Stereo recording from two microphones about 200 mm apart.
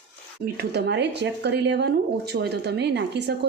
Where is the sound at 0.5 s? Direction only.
55° right (ahead or behind).